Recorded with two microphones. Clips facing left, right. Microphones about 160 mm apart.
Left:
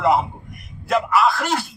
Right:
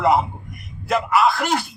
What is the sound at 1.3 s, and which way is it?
Speech, 15° right (ahead or behind).